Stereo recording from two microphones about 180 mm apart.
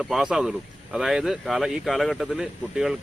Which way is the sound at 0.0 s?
5° right (ahead or behind).